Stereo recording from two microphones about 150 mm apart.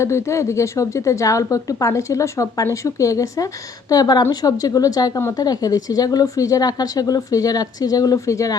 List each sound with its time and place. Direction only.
0.0 s a woman's voice: 20° left (ahead or behind)